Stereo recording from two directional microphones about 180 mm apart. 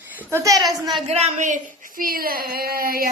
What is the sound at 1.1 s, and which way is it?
Speech, 35° right (ahead or behind).